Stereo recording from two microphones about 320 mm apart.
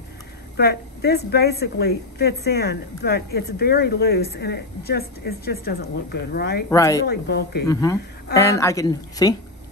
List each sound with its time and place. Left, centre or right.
0.6 s a woman's voice: left
6.7 s speech: centre
7.1 s a woman's voice: left
7.6 s speech: centre